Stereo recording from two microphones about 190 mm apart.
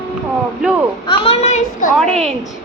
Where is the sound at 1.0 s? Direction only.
30° left (ahead or behind).